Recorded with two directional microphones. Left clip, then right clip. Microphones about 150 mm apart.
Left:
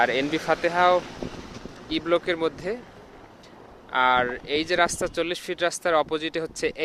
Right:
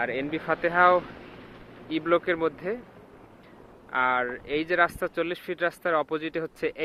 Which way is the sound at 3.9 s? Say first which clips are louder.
Left 4 dB; 25° left (ahead or behind).